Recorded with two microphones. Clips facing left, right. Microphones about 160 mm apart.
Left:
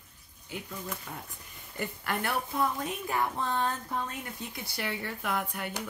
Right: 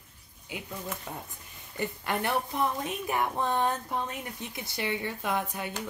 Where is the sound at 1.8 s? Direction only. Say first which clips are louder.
Right 2 dB; 20° right (ahead or behind).